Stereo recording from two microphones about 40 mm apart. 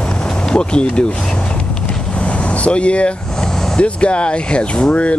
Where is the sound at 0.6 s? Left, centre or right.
Left.